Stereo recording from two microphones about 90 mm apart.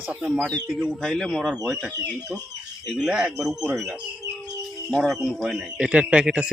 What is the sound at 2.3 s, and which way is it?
Speech, 20° right (ahead or behind).